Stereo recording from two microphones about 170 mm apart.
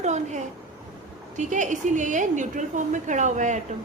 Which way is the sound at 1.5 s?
45° right (ahead or behind).